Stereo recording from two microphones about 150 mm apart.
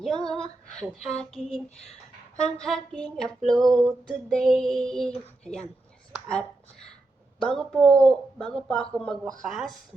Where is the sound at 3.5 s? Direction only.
25° right (ahead or behind).